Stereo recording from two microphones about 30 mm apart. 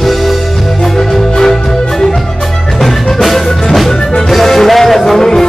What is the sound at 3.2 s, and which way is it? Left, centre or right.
Music, centre.